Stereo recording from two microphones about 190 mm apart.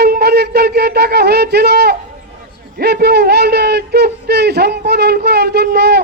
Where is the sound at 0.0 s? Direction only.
60° right (ahead or behind).